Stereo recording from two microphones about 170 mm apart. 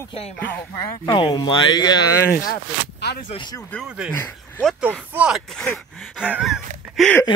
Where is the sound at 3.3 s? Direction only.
25° left (ahead or behind).